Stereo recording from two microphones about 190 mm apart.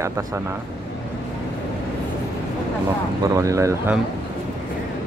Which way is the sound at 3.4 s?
15° right (ahead or behind).